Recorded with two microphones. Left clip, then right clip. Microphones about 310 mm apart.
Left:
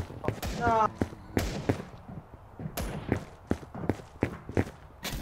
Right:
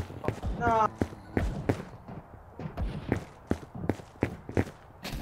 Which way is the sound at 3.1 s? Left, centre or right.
Centre.